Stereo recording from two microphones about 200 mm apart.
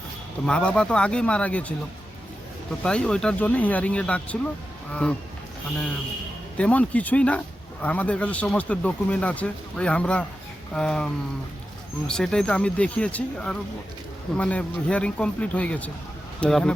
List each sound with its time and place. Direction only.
0.4 s speech: 5° left (ahead or behind)
2.8 s speech: 5° left (ahead or behind)
6.6 s speech: 5° left (ahead or behind)